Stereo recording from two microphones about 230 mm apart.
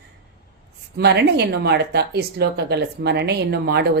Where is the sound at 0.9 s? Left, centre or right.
Right.